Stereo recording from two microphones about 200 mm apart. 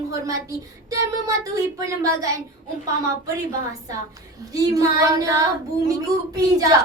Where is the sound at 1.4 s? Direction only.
15° right (ahead or behind).